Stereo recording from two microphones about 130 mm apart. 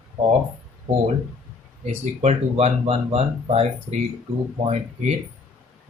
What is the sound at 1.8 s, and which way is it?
Speech, 60° right (ahead or behind).